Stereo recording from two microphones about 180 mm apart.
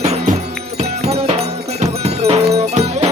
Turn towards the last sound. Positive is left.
turn(degrees=-35)  # may be behind; listen again after turning